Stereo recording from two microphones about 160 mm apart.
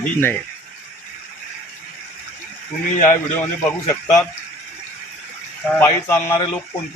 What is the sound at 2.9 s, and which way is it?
Speech, 50° left (ahead or behind).